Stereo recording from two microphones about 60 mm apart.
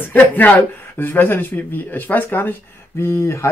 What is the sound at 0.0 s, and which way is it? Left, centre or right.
Speech, left.